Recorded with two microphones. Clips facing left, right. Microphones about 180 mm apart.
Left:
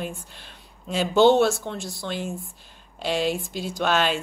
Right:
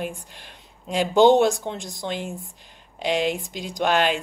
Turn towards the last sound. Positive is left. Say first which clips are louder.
# right 2 dB
turn(degrees=-15)  # may be behind; listen again after turning